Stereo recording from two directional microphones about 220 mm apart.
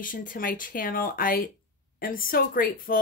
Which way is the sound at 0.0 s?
40° left (ahead or behind).